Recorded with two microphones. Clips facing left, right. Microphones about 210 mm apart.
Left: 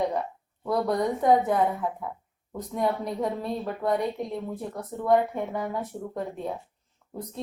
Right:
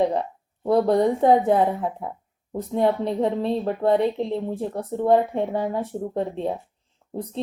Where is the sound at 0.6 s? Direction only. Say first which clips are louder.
Right 7 dB; 30° right (ahead or behind).